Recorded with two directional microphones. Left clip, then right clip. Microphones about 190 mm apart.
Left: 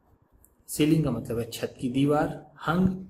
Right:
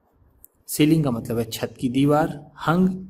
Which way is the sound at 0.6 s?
50° right (ahead or behind).